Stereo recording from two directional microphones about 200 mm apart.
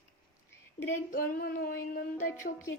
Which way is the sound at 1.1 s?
45° left (ahead or behind).